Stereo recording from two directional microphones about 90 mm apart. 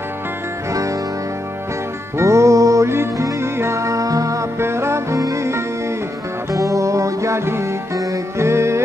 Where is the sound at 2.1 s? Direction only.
35° right (ahead or behind).